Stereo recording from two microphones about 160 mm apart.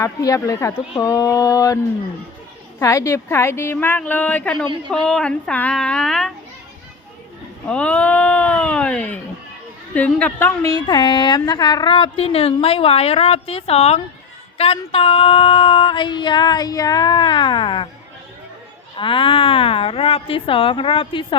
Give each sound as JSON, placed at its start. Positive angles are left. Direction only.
{"t": 0.0, "sound": "a woman's voice", "side_deg": 20}
{"t": 7.7, "sound": "a woman's voice", "side_deg": 10}
{"t": 18.9, "sound": "speech", "side_deg": 30}